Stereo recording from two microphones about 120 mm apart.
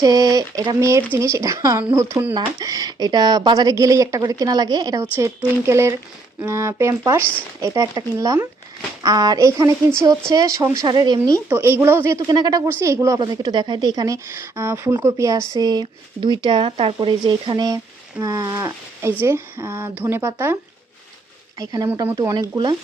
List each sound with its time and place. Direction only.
0.0 s speech: 30° right (ahead or behind)
5.1 s speech: 20° right (ahead or behind)
10.8 s speech: 35° right (ahead or behind)
11.4 s speech: 20° right (ahead or behind)
12.3 s speech: 35° right (ahead or behind)
13.1 s speech: 35° right (ahead or behind)
21.6 s speech: 30° right (ahead or behind)